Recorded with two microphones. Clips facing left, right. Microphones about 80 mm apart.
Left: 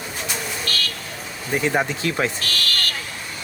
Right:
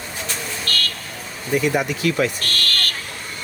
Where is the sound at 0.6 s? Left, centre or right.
Right.